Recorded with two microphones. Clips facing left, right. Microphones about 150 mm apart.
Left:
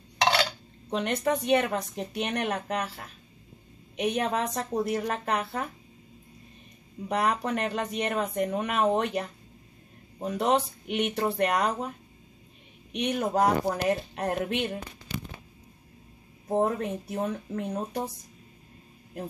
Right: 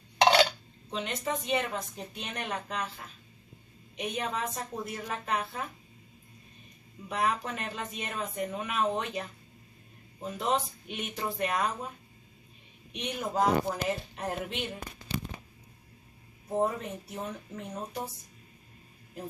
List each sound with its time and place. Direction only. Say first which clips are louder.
0.2 s a sound: right 3 dB; 25° right (ahead or behind)
0.8 s speech: left 7 dB; 65° left (ahead or behind)
3.9 s a woman's voice: left 7 dB; 70° left (ahead or behind)
7.1 s speech: left 4 dB; 60° left (ahead or behind)
10.2 s a woman's voice: left 5 dB; 70° left (ahead or behind)
12.9 s speech: left 6 dB; 65° left (ahead or behind)
15.1 s tearing: right 1 dB; 35° right (ahead or behind)
16.6 s speech: left 3 dB; 60° left (ahead or behind)